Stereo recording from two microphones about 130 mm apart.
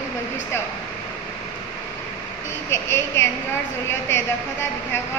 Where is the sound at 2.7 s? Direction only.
20° left (ahead or behind).